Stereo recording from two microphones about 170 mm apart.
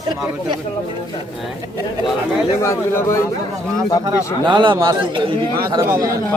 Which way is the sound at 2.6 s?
15° left (ahead or behind).